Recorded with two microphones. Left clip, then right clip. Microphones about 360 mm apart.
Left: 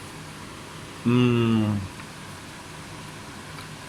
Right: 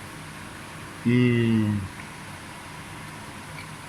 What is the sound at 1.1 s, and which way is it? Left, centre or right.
Speech, left.